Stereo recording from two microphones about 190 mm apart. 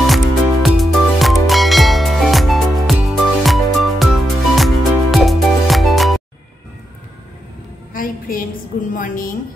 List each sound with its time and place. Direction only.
0.0 s music: centre (ahead or behind)
7.9 s a sound: 50° left (ahead or behind)
8.9 s a woman's voice: 45° left (ahead or behind)